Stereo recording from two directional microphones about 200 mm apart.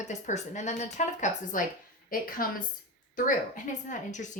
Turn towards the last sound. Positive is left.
turn(degrees=40)  # may be behind; listen again after turning